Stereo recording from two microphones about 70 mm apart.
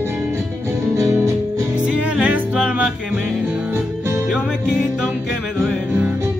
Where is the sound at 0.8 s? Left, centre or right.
Right.